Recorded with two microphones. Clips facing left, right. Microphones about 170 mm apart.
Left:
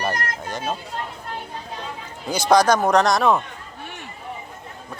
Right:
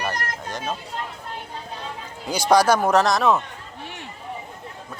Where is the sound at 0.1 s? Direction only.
Centre (ahead or behind).